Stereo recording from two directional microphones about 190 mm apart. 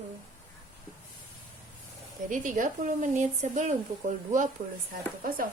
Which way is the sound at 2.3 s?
45° right (ahead or behind).